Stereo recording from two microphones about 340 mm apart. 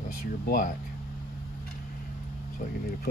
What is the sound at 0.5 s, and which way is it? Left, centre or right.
Speech, left.